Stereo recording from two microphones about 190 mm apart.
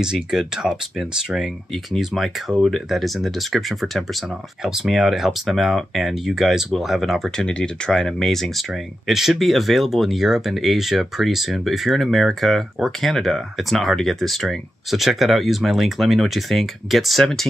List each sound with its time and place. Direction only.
0.0 s speech: 5° right (ahead or behind)